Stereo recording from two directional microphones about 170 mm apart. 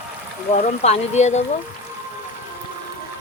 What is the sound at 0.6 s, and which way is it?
Speech, 40° left (ahead or behind).